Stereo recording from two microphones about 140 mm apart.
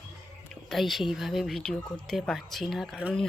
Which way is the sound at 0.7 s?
Centre (ahead or behind).